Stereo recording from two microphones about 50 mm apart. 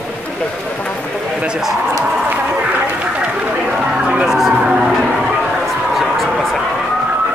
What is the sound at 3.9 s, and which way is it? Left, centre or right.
Music, centre.